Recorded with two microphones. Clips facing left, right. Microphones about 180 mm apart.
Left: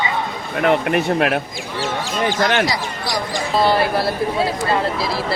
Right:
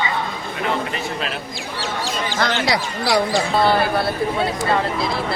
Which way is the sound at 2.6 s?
65° right (ahead or behind).